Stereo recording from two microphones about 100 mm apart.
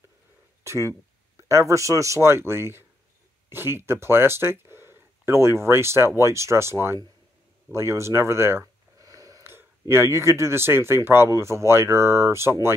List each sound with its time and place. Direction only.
0.7 s speech: 30° right (ahead or behind)